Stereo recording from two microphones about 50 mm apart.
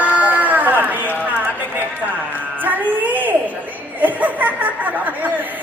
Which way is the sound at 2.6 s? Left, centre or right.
Right.